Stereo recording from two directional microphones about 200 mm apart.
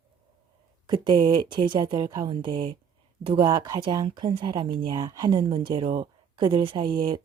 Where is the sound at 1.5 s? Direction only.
25° right (ahead or behind).